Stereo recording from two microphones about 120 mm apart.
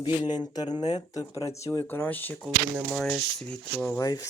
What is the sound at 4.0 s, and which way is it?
Speech, 30° left (ahead or behind).